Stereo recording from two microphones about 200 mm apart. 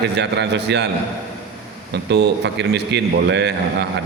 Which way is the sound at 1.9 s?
55° right (ahead or behind).